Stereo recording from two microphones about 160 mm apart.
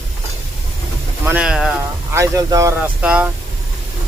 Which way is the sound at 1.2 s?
10° right (ahead or behind).